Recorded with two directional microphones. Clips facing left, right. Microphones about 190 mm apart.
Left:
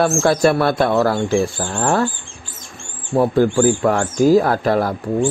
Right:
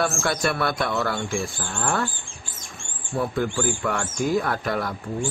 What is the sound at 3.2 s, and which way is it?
Speech, 35° left (ahead or behind).